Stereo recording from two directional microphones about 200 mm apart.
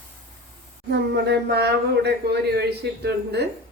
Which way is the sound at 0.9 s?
55° right (ahead or behind).